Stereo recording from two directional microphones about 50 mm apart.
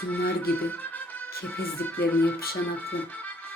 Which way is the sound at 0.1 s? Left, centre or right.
Left.